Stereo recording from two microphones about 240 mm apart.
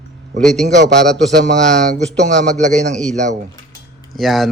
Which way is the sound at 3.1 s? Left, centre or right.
Right.